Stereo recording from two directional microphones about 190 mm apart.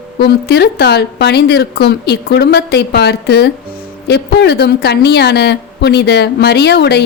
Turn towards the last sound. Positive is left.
turn(degrees=60)  # may be behind; listen again after turning